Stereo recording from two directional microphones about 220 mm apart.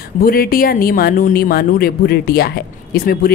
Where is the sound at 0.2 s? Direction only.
40° left (ahead or behind).